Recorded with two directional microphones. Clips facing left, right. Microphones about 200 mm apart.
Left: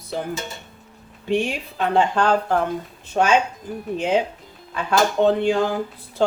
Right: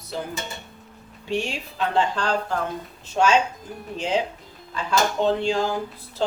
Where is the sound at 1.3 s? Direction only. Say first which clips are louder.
Left 5 dB; 55° left (ahead or behind).